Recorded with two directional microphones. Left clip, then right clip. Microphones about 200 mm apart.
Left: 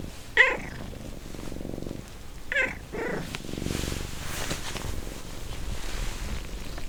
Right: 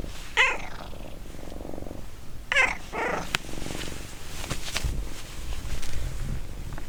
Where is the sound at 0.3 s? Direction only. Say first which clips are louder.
Left 2 dB; 25° right (ahead or behind).